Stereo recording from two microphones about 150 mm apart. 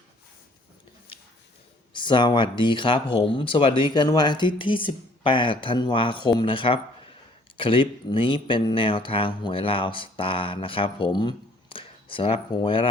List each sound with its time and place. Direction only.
1.9 s speech: 30° left (ahead or behind)